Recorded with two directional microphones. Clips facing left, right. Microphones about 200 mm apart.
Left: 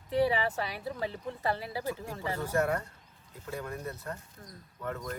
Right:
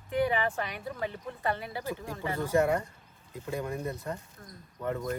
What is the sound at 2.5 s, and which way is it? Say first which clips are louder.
Speech: right 4 dB; 10° right (ahead or behind).